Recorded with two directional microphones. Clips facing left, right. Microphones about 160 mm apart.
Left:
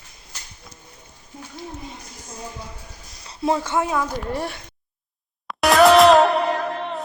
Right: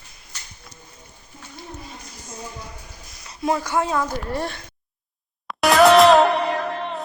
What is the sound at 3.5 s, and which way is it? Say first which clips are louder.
A woman's voice: even; 20° left (ahead or behind).